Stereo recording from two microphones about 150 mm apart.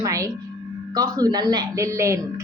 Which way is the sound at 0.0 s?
20° right (ahead or behind).